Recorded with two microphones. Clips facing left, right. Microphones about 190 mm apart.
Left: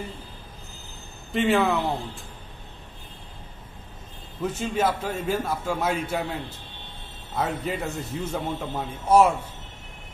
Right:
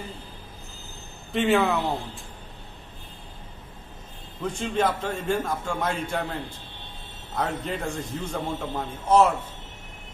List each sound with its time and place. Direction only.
1.3 s speech: centre (ahead or behind)
4.4 s a man's voice: 5° left (ahead or behind)
7.3 s a man's voice: 5° left (ahead or behind)